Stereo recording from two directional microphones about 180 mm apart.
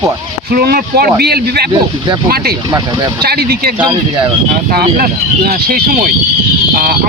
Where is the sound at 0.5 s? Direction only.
60° right (ahead or behind).